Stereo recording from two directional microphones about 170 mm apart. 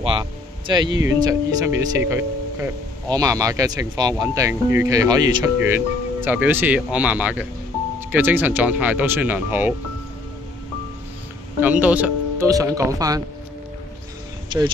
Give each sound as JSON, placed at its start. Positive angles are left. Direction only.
{"t": 0.0, "sound": "speech", "side_deg": -30}
{"t": 6.2, "sound": "speech", "side_deg": -10}
{"t": 11.6, "sound": "speech", "side_deg": -10}
{"t": 12.4, "sound": "speech", "side_deg": -20}